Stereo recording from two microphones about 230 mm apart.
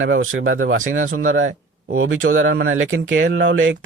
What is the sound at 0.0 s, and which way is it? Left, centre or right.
Speech, right.